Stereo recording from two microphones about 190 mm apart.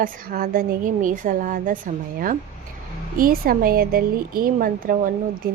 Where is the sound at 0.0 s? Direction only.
45° right (ahead or behind).